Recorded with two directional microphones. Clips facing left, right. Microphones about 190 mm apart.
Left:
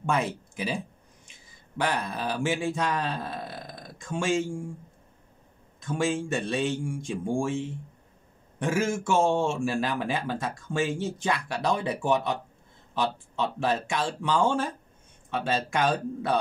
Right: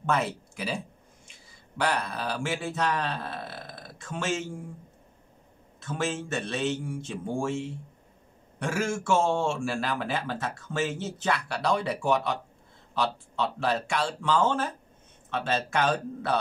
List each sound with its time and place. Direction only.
0.0 s speech: 15° left (ahead or behind)
1.8 s speech: 15° left (ahead or behind)
5.8 s speech: 15° left (ahead or behind)
8.5 s speech: 15° left (ahead or behind)